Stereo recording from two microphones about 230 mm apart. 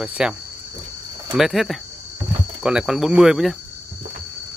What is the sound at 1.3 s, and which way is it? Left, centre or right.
Speech, centre.